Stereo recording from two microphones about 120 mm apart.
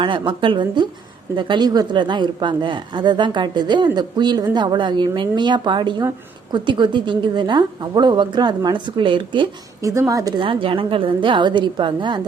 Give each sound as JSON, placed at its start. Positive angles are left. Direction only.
{"t": 0.0, "sound": "a woman's voice", "side_deg": -45}
{"t": 9.8, "sound": "a woman's voice", "side_deg": -25}
{"t": 10.4, "sound": "a woman's voice", "side_deg": -50}